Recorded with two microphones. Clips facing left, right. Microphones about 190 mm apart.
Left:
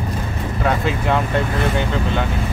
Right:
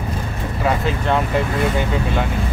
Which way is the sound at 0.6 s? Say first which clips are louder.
Even; centre (ahead or behind).